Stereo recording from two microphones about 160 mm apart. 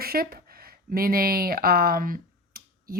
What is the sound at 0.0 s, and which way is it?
Speech, 70° right (ahead or behind).